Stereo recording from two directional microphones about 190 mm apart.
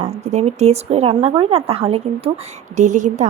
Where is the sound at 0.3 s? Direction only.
35° right (ahead or behind).